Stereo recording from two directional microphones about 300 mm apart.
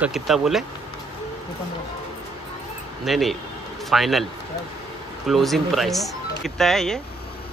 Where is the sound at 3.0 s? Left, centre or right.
Centre.